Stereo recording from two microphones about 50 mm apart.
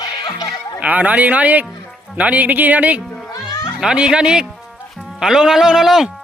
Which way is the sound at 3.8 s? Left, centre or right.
Centre.